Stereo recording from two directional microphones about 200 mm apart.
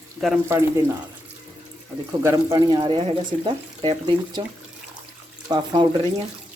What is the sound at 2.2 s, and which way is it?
Speech, 20° right (ahead or behind).